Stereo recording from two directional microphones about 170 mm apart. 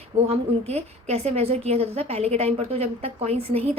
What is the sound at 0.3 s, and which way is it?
A woman's voice, 40° right (ahead or behind).